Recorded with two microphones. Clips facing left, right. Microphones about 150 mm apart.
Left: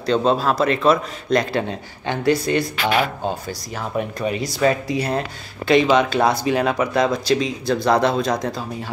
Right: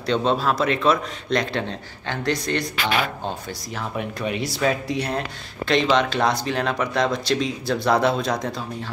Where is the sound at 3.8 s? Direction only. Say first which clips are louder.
Left 4 dB; centre (ahead or behind).